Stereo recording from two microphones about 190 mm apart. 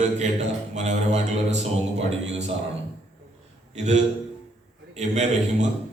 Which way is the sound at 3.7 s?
35° right (ahead or behind).